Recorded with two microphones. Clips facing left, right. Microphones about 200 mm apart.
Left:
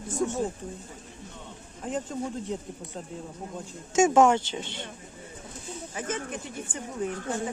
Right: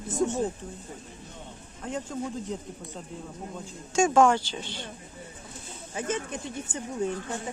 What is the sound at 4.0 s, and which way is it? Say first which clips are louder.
Speech: left 1 dB; 20° left (ahead or behind).